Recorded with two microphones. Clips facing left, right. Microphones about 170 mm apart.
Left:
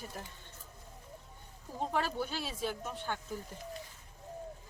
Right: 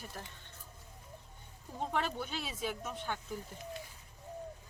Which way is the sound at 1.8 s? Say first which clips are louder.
Left 2 dB; centre (ahead or behind).